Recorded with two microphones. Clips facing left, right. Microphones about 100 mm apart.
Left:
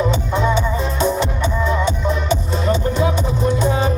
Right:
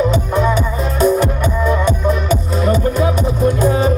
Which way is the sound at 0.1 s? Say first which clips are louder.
Right 3 dB; 25° left (ahead or behind).